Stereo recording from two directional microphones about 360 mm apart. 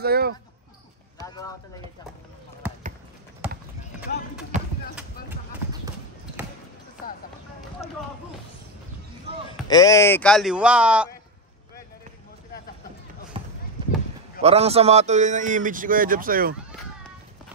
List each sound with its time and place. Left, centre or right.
0.0 s a man's voice: right
1.2 s a sound: centre
9.5 s speech: centre
13.4 s run: centre
14.4 s a man's voice: centre